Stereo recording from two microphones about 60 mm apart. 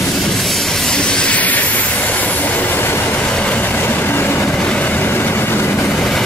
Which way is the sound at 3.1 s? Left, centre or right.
Centre.